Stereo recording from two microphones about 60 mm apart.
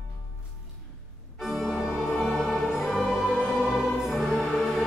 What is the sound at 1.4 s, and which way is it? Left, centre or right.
Organ, centre.